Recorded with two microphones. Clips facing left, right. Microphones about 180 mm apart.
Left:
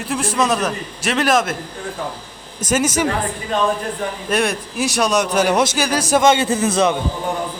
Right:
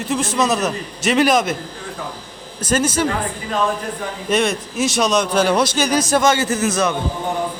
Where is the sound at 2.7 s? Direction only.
10° left (ahead or behind).